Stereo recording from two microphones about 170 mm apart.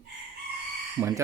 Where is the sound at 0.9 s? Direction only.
20° right (ahead or behind).